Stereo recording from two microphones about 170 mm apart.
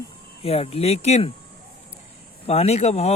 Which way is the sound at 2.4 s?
35° left (ahead or behind).